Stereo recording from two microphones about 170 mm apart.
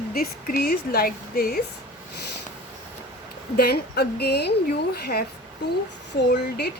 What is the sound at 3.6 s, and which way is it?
Speech, 70° left (ahead or behind).